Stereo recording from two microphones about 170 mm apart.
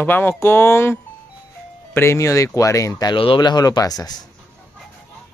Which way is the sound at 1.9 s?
15° left (ahead or behind).